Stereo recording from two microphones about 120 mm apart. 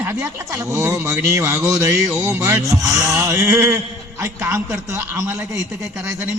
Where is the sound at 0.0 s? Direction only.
20° right (ahead or behind).